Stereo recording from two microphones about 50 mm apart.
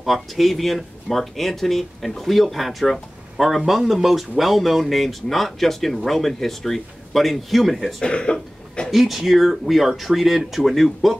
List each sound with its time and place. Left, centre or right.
0.0 s speech: centre
8.0 s throat clearing: centre
8.9 s speech: centre